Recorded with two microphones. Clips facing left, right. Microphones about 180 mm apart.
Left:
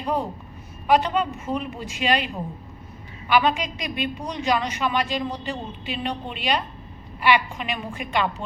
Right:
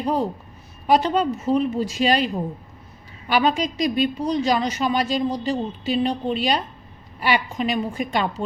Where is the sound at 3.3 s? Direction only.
40° right (ahead or behind).